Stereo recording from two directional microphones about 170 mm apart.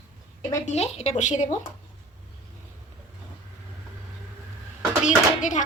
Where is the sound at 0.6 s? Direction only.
40° left (ahead or behind).